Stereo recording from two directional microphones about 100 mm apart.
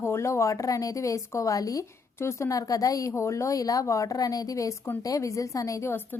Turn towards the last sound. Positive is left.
turn(degrees=30)  # may be behind; listen again after turning